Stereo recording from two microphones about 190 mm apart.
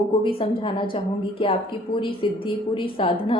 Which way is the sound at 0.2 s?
30° left (ahead or behind).